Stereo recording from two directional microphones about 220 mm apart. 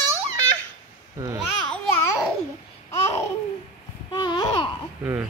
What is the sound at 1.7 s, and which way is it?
Babbling, 10° left (ahead or behind).